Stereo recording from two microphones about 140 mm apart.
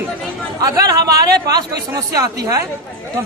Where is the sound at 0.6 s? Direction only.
25° right (ahead or behind).